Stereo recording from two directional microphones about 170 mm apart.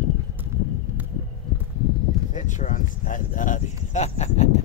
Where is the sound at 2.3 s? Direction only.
45° left (ahead or behind).